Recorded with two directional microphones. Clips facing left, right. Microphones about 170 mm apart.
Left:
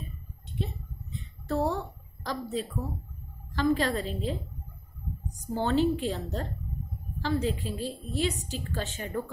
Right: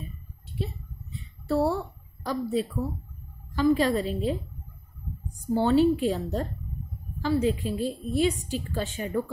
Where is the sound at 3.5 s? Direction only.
10° right (ahead or behind).